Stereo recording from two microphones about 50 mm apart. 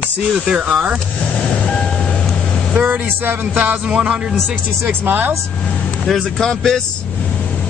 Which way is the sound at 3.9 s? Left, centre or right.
Centre.